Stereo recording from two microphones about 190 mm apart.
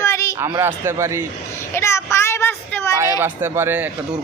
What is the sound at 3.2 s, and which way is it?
Speech, 10° right (ahead or behind).